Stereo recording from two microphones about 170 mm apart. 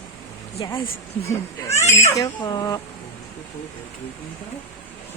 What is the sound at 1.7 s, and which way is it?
Baby cry, 15° left (ahead or behind).